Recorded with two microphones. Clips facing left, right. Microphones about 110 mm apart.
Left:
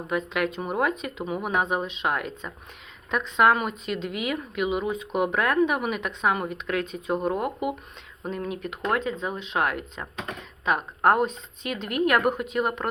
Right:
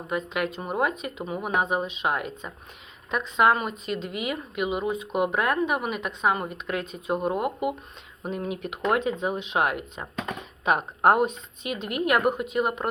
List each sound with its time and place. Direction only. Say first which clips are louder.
0.1 s speech: left 1 dB; centre (ahead or behind)
8.4 s speech: right 3 dB; 15° right (ahead or behind)